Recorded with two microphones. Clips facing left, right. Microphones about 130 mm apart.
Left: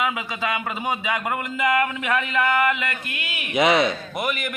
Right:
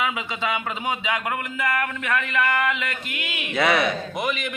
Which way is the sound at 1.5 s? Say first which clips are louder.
Left 4 dB; 15° left (ahead or behind).